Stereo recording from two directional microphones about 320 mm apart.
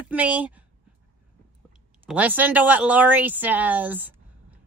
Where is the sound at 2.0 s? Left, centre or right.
Centre.